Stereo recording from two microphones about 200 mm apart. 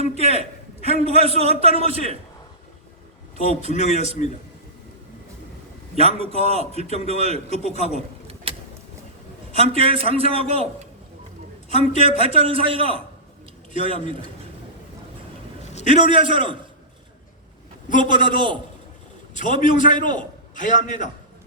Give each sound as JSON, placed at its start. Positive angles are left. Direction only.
{"t": 0.1, "sound": "a man's voice", "side_deg": 35}
{"t": 0.8, "sound": "a man's voice", "side_deg": -30}
{"t": 3.7, "sound": "a man's voice", "side_deg": 35}
{"t": 6.0, "sound": "a man's voice", "side_deg": -30}
{"t": 7.5, "sound": "a man's voice", "side_deg": 35}
{"t": 7.9, "sound": "a sound", "side_deg": -30}
{"t": 9.5, "sound": "a man's voice", "side_deg": -30}
{"t": 11.8, "sound": "a man's voice", "side_deg": -30}
{"t": 15.7, "sound": "a sound", "side_deg": 35}
{"t": 16.0, "sound": "a man's voice", "side_deg": -25}
{"t": 18.0, "sound": "a man's voice", "side_deg": -25}
{"t": 19.3, "sound": "a man's voice", "side_deg": 40}